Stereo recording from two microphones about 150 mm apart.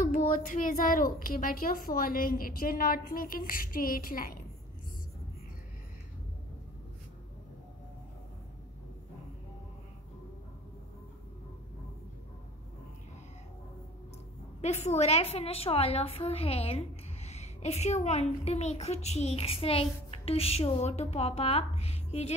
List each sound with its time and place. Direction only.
0.0 s a woman's voice: 65° left (ahead or behind)
14.6 s a woman's voice: 45° left (ahead or behind)